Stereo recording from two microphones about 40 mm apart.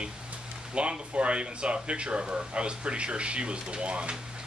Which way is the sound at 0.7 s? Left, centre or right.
Right.